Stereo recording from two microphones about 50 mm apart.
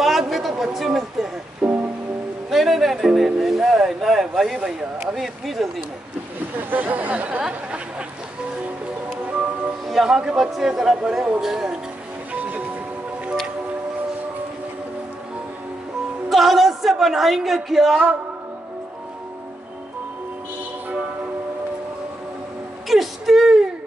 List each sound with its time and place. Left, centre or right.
0.0 s a sound: centre
0.7 s a woman's voice: centre
1.6 s music: centre
2.5 s music: centre
3.3 s speech: centre
6.7 s speech: right
9.2 s music: right
9.8 s speech: centre
12.3 s music: right
16.3 s a woman's voice: centre
22.8 s a sound: centre